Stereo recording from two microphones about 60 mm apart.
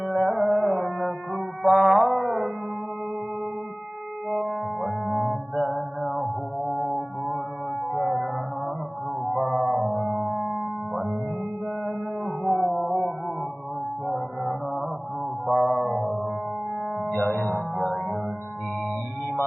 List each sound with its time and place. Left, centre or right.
0.1 s music: centre
4.3 s music: centre
14.1 s mantra: centre
15.4 s music: centre
17.1 s music: left
17.7 s music: centre